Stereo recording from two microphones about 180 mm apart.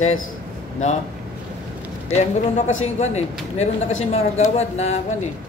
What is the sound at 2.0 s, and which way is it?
Speech, 40° left (ahead or behind).